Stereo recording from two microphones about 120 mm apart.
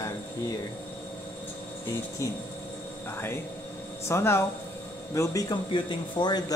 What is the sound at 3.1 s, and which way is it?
Speech, 20° left (ahead or behind).